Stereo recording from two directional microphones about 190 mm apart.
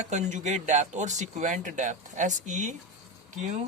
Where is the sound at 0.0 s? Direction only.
35° right (ahead or behind).